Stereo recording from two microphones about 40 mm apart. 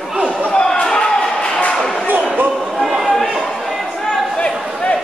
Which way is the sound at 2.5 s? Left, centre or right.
Centre.